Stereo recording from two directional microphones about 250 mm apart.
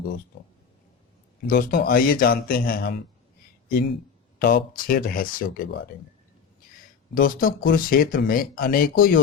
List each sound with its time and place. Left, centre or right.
1.5 s speech: left
4.4 s speech: left
7.1 s speech: left